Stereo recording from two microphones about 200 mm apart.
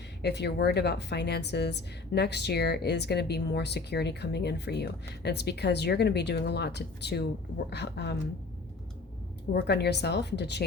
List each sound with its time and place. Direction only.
0.2 s a woman's voice: 55° left (ahead or behind)
9.5 s a woman's voice: 55° left (ahead or behind)